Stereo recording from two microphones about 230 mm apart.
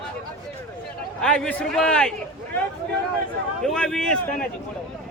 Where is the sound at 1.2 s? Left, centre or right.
Centre.